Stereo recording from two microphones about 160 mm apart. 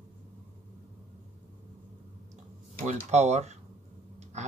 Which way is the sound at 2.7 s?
45° right (ahead or behind).